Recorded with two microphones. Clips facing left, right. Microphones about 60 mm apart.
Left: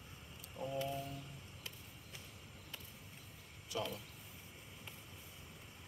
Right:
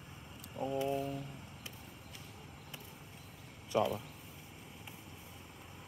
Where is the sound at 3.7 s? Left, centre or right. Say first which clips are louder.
Right 10 dB; right.